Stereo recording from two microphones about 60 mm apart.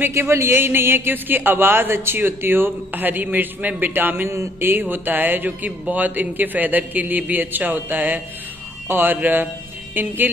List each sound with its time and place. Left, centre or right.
0.1 s a man's voice: right